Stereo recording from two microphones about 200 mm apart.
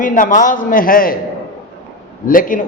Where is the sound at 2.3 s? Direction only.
45° left (ahead or behind).